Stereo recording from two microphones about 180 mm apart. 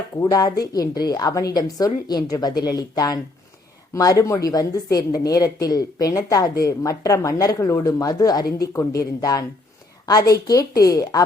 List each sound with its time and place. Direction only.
0.2 s a woman's voice: 20° left (ahead or behind)